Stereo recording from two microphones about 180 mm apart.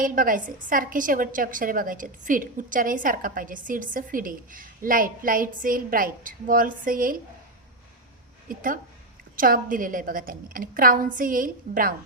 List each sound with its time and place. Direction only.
0.0 s a woman's voice: 50° right (ahead or behind)
8.4 s a woman's voice: 50° right (ahead or behind)